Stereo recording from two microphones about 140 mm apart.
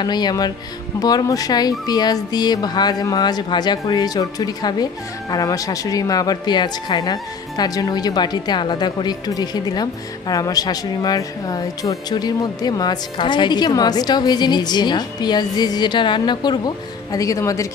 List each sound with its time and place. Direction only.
0.0 s speech: 30° left (ahead or behind)